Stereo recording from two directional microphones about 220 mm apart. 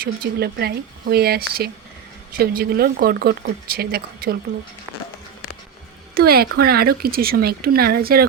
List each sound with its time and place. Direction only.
0.0 s speech: 45° right (ahead or behind)
6.1 s speech: 45° right (ahead or behind)